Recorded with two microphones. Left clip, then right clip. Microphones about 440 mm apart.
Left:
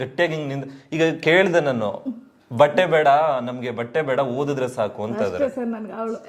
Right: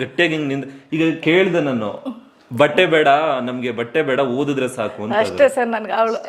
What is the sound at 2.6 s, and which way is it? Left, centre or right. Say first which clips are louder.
A man's voice: right 2 dB; left.